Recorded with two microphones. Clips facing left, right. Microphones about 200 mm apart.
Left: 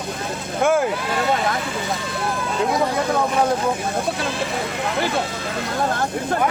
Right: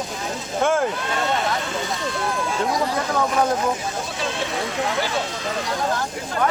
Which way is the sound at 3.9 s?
60° left (ahead or behind).